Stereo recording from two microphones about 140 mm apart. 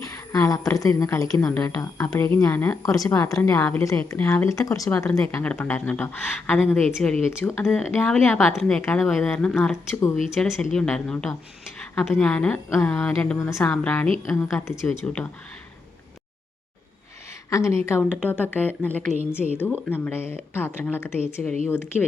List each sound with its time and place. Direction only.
0.1 s a woman's voice: 20° left (ahead or behind); by 7.3 s centre (ahead or behind)
7.3 s speech: 15° left (ahead or behind)
13.5 s speech: 20° left (ahead or behind)
13.8 s speech: 10° left (ahead or behind)
14.8 s speech: 10° left (ahead or behind)
17.5 s speech: 20° left (ahead or behind)